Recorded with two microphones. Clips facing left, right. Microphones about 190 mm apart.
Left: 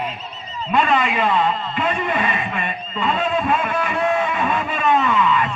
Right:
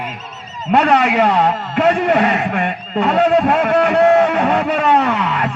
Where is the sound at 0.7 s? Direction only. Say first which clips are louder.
Right 6 dB; 80° right.